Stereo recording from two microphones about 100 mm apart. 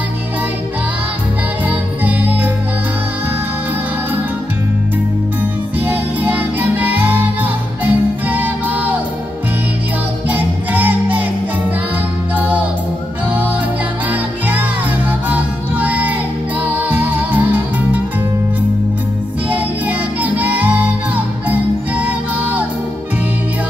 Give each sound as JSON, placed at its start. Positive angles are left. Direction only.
{"t": 1.7, "sound": "music", "side_deg": -15}
{"t": 5.9, "sound": "music", "side_deg": -15}
{"t": 10.3, "sound": "music", "side_deg": -15}
{"t": 12.4, "sound": "music", "side_deg": -15}
{"t": 15.2, "sound": "music", "side_deg": -15}
{"t": 19.5, "sound": "music", "side_deg": -15}